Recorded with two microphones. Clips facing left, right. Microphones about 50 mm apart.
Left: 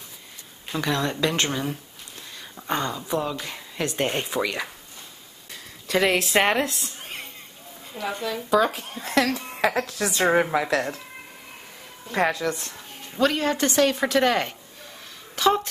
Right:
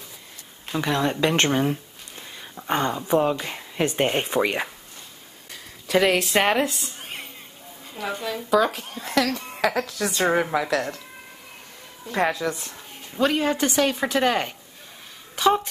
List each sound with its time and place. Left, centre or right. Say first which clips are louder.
0.7 s a woman's voice: right 2 dB; centre
1.2 s speech: right 4 dB; right
5.5 s a sound: right 3 dB; centre
7.9 s speech: even; centre
12.1 s a woman's voice: even; centre